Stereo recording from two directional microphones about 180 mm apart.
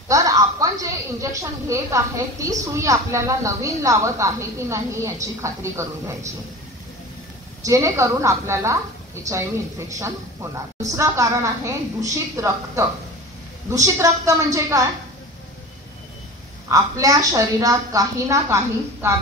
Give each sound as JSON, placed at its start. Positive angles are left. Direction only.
{"t": 0.1, "sound": "a woman's voice", "side_deg": -20}
{"t": 7.6, "sound": "a woman's voice", "side_deg": -15}
{"t": 16.7, "sound": "a woman's voice", "side_deg": -20}